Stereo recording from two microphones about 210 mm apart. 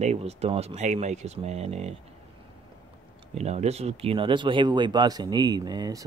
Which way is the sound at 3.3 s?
30° right (ahead or behind).